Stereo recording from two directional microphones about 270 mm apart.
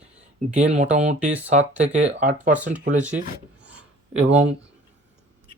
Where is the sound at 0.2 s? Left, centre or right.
Right.